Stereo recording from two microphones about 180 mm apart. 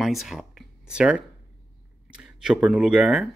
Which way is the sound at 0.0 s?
Centre (ahead or behind).